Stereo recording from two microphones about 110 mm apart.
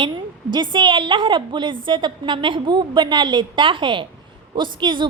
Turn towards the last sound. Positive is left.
turn(degrees=-45)  # may be behind; listen again after turning